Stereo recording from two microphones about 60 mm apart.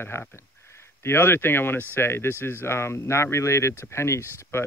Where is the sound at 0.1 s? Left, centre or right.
Left.